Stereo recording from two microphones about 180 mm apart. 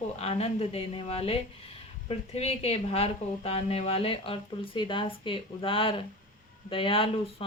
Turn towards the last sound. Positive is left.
turn(degrees=30)  # may be behind; listen again after turning